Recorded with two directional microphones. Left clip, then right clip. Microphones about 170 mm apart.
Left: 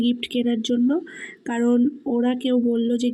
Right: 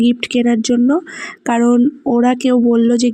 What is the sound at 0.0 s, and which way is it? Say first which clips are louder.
Speech: right 8 dB; 35° right (ahead or behind).